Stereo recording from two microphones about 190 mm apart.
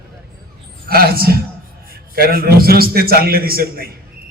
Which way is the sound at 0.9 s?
55° right (ahead or behind).